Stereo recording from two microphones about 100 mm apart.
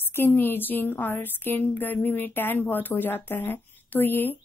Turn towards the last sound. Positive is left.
turn(degrees=20)  # may be behind; listen again after turning